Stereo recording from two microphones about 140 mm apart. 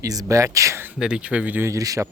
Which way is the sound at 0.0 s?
25° right (ahead or behind).